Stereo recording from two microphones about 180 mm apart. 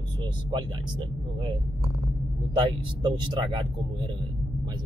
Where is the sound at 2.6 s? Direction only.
25° right (ahead or behind).